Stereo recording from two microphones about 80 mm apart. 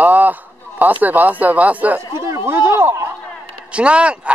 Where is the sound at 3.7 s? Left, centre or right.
Centre.